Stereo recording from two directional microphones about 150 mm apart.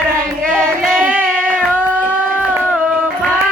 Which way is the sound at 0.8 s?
5° right (ahead or behind).